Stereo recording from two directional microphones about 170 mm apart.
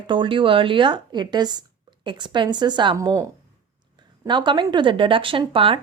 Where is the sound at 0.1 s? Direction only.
30° right (ahead or behind).